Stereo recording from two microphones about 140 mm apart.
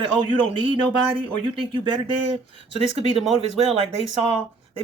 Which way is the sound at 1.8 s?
35° right (ahead or behind).